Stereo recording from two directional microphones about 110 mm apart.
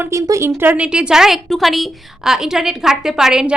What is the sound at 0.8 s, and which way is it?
A woman's voice, 5° right (ahead or behind).